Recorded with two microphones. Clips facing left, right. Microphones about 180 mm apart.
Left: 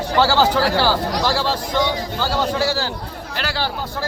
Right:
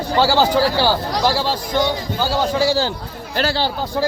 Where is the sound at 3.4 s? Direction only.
25° right (ahead or behind).